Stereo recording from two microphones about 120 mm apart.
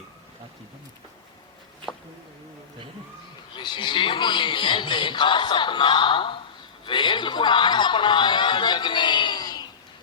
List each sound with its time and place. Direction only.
3.5 s a man's voice: 40° left (ahead or behind)